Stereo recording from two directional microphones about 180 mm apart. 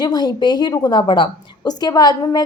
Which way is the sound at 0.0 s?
25° left (ahead or behind).